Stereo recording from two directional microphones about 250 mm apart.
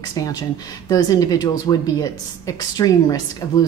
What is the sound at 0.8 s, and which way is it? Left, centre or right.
A woman's voice, centre.